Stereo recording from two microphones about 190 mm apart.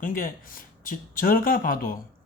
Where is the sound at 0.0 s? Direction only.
45° left (ahead or behind).